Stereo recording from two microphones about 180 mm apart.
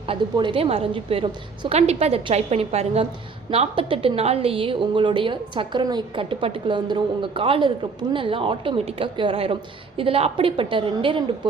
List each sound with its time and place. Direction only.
0.1 s a woman's voice: 30° right (ahead or behind)